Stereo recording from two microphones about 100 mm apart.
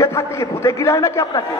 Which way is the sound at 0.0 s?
30° left (ahead or behind).